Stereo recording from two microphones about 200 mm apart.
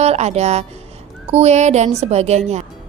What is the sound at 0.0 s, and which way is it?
A woman's voice, 35° right (ahead or behind).